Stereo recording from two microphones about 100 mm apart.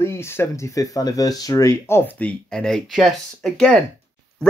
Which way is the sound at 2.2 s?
5° left (ahead or behind).